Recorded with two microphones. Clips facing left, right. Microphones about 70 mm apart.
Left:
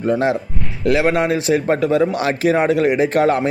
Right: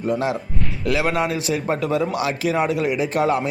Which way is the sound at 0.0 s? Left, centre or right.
Left.